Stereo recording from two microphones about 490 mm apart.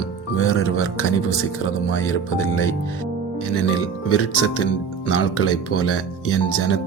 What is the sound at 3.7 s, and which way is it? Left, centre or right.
Speech, left.